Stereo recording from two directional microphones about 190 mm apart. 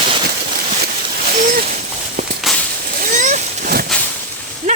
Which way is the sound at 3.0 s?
45° right (ahead or behind).